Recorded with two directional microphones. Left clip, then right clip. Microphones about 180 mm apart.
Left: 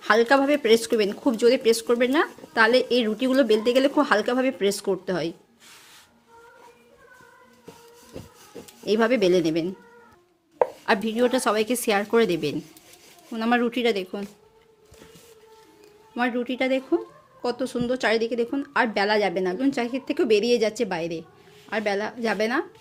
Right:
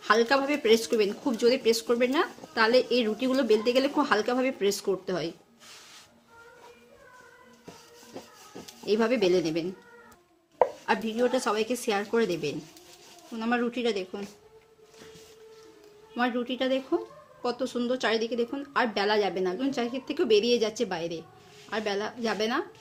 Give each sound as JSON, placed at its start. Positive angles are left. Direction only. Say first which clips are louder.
{"t": 0.0, "sound": "speech", "louder": "left 4 dB", "side_deg": 35}
{"t": 8.8, "sound": "speech", "louder": "left 4 dB", "side_deg": 35}
{"t": 10.8, "sound": "a woman's voice", "louder": "left 4 dB", "side_deg": 50}
{"t": 16.1, "sound": "speech", "louder": "left 3 dB", "side_deg": 35}